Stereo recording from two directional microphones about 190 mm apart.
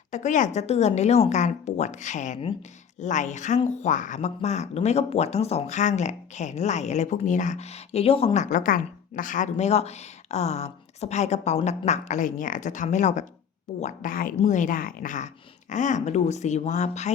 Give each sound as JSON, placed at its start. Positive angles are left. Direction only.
{"t": 0.1, "sound": "speech", "side_deg": 40}